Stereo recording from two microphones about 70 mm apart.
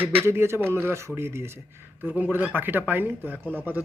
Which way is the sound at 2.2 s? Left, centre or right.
Right.